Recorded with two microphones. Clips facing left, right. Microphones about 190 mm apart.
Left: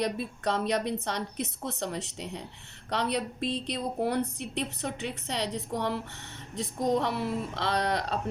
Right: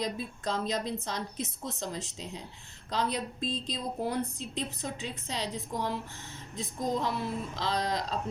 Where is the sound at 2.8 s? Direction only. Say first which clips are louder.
Left 2 dB; 70° left (ahead or behind).